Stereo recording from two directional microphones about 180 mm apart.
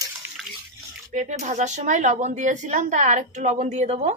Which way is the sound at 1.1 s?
45° right (ahead or behind).